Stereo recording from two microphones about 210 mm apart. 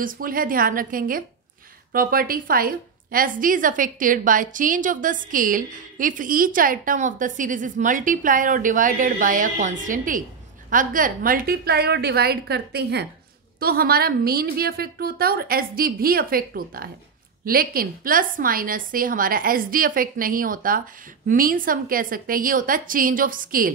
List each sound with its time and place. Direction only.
0.0 s a woman's voice: 40° right (ahead or behind)